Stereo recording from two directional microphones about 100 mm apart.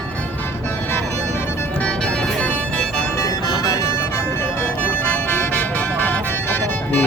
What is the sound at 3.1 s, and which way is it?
Music, 35° left (ahead or behind).